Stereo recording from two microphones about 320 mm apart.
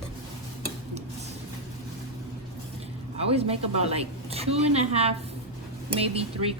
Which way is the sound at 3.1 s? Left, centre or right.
Centre.